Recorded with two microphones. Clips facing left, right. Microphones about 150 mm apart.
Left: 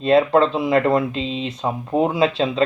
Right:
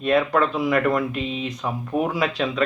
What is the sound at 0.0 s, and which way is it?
Speech, 25° left (ahead or behind).